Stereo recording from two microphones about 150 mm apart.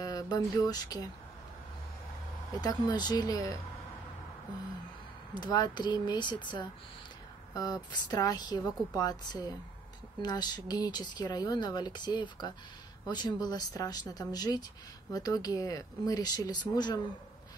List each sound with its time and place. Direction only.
0.0 s speech: 25° left (ahead or behind)
2.6 s speech: 25° left (ahead or behind)
5.3 s speech: 30° left (ahead or behind)